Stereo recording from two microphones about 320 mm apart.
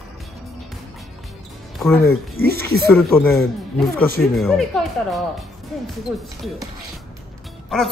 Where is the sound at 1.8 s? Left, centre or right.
Centre.